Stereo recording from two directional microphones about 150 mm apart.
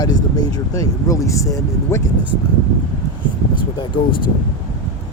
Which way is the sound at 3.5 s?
35° left (ahead or behind).